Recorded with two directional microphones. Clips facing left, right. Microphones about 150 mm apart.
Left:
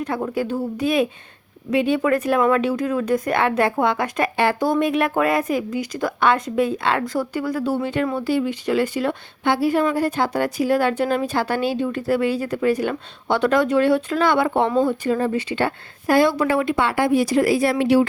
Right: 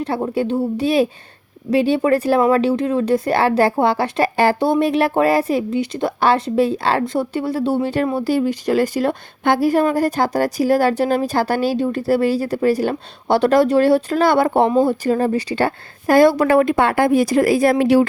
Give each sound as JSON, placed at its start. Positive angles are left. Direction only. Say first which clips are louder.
{"t": 0.2, "sound": "a woman's voice", "louder": "right 4 dB", "side_deg": -25}